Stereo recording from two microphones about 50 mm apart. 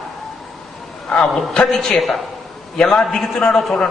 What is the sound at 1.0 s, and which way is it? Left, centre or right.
Speech, centre.